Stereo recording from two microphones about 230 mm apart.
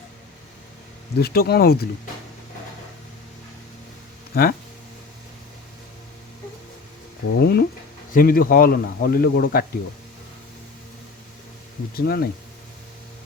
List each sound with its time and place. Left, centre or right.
1.2 s speech: left
4.3 s speech: left
7.3 s speech: left
11.9 s speech: left